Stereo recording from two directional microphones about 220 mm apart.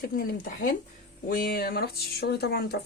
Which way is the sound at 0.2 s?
40° left (ahead or behind).